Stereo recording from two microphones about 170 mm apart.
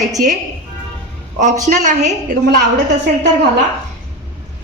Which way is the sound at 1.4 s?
45° right (ahead or behind).